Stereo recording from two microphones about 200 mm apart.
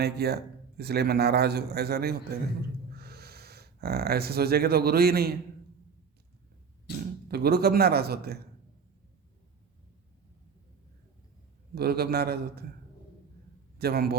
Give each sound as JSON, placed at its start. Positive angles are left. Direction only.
{"t": 0.0, "sound": "a man's voice", "side_deg": -55}
{"t": 7.3, "sound": "a man's voice", "side_deg": -50}
{"t": 11.7, "sound": "a man's voice", "side_deg": -50}
{"t": 13.7, "sound": "a man's voice", "side_deg": -50}